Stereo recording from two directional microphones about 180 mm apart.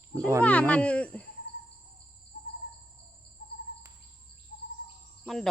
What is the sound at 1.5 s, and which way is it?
Cricket, 70° left (ahead or behind).